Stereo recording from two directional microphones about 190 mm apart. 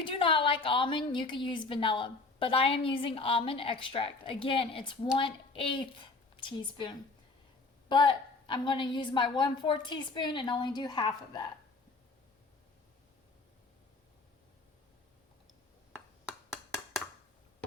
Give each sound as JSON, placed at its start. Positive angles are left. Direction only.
{"t": 0.0, "sound": "a woman's voice", "side_deg": 25}